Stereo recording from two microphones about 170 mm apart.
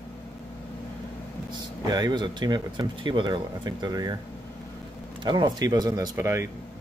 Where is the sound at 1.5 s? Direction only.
25° right (ahead or behind).